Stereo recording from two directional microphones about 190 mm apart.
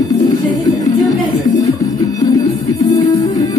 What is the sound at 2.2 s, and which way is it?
Music, 20° left (ahead or behind).